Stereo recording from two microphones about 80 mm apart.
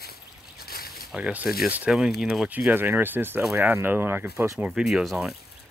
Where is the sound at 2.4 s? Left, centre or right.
Right.